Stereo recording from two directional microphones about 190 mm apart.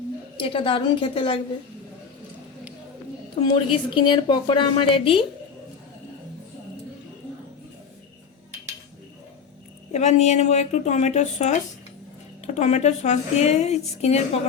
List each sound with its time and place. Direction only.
0.3 s a woman's voice: 25° left (ahead or behind)
3.4 s a woman's voice: 25° left (ahead or behind)
9.9 s a woman's voice: 35° left (ahead or behind)